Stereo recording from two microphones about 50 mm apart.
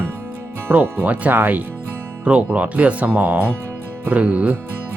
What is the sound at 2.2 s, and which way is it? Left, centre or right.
Speech, right.